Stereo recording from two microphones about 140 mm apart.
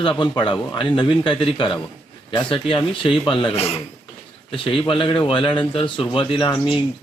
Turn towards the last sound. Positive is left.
turn(degrees=35)  # may be behind; listen again after turning